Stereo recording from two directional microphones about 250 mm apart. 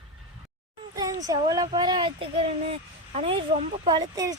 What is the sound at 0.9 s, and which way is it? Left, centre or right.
Speech, centre.